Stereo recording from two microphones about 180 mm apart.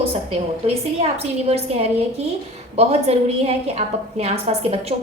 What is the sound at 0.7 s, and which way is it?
A woman's voice, 35° right (ahead or behind).